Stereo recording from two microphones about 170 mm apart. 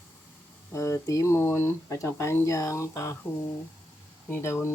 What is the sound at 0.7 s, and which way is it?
Speech, 15° left (ahead or behind).